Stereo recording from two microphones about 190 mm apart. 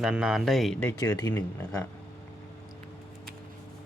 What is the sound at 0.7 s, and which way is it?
Speech, 15° left (ahead or behind).